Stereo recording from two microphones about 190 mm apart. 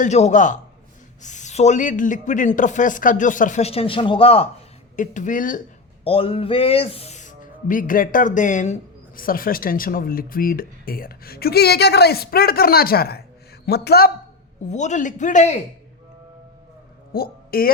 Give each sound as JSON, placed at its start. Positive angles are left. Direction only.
{"t": 0.0, "sound": "speech", "side_deg": 40}
{"t": 4.9, "sound": "speech", "side_deg": 40}
{"t": 6.1, "sound": "speech", "side_deg": 30}
{"t": 14.7, "sound": "speech", "side_deg": 40}
{"t": 17.1, "sound": "a sound", "side_deg": 50}